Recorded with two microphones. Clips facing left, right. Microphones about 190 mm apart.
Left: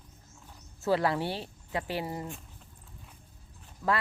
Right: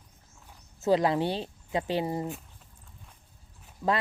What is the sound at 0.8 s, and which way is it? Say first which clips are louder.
Speech: right 3 dB; 20° right (ahead or behind).